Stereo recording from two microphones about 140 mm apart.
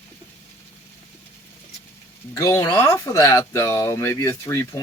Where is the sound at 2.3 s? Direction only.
20° left (ahead or behind).